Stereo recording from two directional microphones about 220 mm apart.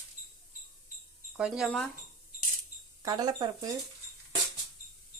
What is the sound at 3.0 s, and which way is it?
Speech, 20° right (ahead or behind).